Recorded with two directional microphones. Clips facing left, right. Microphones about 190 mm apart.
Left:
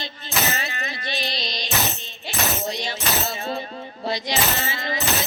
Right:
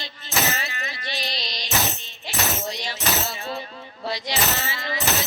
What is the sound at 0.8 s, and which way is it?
Music, 25° left (ahead or behind).